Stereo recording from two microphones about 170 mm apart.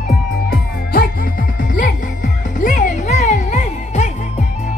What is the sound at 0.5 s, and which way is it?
Music, 60° left (ahead or behind).